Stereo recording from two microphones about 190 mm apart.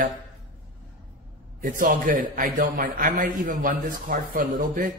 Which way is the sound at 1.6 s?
45° right (ahead or behind).